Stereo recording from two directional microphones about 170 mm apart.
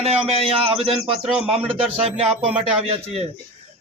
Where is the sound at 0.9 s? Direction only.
Centre (ahead or behind).